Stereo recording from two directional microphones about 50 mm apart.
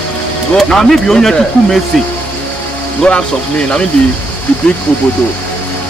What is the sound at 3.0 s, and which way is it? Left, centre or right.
Speech, left.